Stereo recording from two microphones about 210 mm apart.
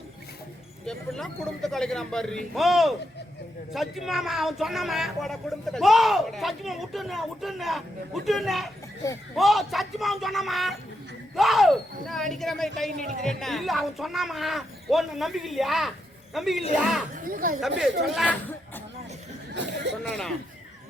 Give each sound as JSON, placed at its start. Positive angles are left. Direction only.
{"t": 0.9, "sound": "speech", "side_deg": 0}
{"t": 17.2, "sound": "speech", "side_deg": -40}
{"t": 18.1, "sound": "speech", "side_deg": 5}
{"t": 19.5, "sound": "a sound", "side_deg": -55}